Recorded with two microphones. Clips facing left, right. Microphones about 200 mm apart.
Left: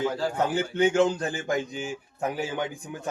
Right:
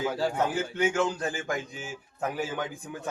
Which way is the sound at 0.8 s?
25° left (ahead or behind).